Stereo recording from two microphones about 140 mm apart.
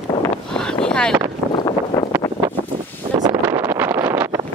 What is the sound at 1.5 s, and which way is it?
Wind noise, 30° left (ahead or behind).